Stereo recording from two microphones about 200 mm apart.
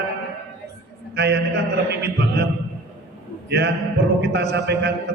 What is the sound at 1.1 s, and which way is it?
Speech, 60° right (ahead or behind).